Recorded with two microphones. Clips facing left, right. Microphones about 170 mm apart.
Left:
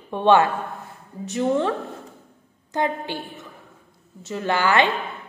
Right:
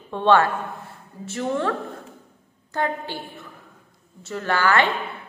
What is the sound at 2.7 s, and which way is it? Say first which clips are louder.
A woman's voice: left 2 dB; 15° left (ahead or behind).